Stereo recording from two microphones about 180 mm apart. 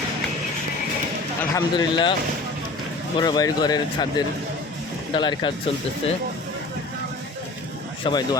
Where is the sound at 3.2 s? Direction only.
20° left (ahead or behind).